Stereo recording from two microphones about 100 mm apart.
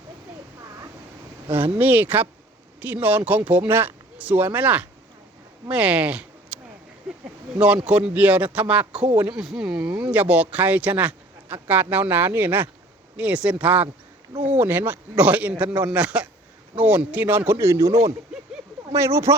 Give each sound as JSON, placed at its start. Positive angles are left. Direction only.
{"t": 1.8, "sound": "speech", "side_deg": -20}
{"t": 7.9, "sound": "speech", "side_deg": -15}
{"t": 9.4, "sound": "speech", "side_deg": -5}
{"t": 18.9, "sound": "speech", "side_deg": -25}